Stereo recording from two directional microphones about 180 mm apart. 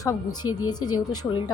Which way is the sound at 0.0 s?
20° left (ahead or behind).